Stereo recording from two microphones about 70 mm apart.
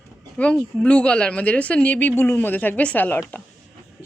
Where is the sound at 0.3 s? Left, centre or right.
Centre.